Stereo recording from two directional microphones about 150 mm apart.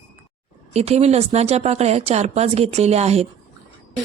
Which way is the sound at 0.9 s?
45° right (ahead or behind).